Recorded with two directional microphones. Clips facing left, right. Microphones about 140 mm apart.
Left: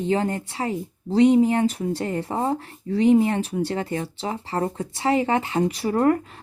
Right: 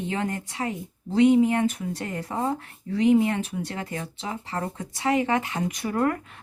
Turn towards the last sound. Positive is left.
turn(degrees=30)  # may be behind; listen again after turning